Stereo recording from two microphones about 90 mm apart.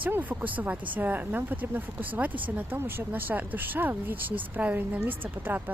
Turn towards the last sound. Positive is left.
turn(degrees=-20)  # may be behind; listen again after turning